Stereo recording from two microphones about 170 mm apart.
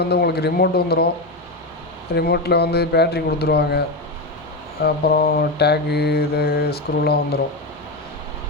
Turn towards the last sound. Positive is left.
turn(degrees=70)  # may be behind; listen again after turning